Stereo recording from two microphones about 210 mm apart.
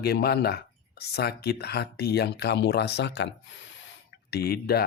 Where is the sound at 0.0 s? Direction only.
50° left (ahead or behind).